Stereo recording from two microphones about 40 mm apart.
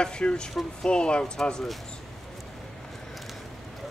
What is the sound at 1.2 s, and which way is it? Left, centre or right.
Speech, centre.